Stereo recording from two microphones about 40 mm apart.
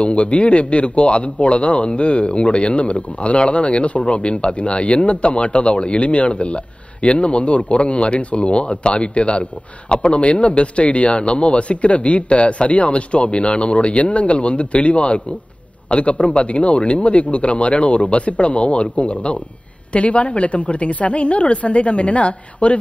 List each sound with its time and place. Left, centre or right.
0.0 s speech: left